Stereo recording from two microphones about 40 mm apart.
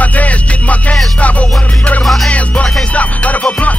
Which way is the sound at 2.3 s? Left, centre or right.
Left.